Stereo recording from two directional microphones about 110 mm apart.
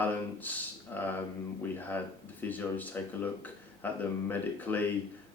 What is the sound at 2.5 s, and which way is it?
Speech, 15° left (ahead or behind).